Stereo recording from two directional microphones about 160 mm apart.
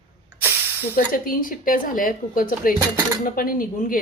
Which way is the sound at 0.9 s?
60° left (ahead or behind).